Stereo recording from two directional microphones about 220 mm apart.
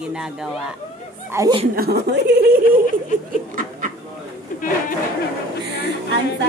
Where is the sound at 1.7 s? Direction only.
45° right (ahead or behind).